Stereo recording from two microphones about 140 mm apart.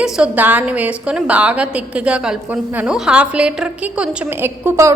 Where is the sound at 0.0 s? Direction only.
10° right (ahead or behind).